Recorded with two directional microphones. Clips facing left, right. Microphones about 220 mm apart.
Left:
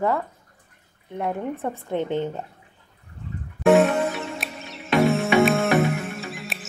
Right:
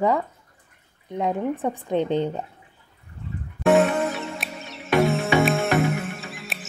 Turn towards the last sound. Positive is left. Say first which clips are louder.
# left 3 dB
turn(degrees=0)  # may be behind; listen again after turning